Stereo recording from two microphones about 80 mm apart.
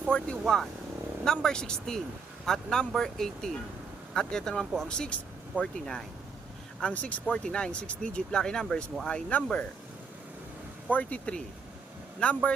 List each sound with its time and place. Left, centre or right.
0.1 s speech: centre
10.8 s speech: centre